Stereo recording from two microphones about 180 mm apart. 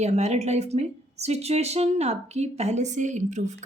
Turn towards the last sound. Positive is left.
turn(degrees=-40)  # may be behind; listen again after turning